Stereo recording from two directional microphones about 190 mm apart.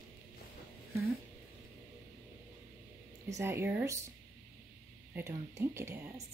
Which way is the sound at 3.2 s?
15° right (ahead or behind).